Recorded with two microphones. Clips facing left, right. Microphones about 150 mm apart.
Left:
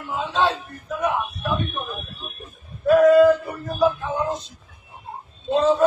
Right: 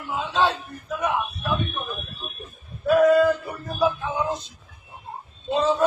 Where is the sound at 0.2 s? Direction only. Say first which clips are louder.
Left 1 dB; centre (ahead or behind).